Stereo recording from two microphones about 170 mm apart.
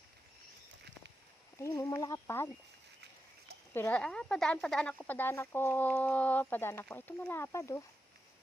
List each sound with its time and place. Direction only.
1.5 s speech: 15° left (ahead or behind)
3.8 s speech: 10° left (ahead or behind)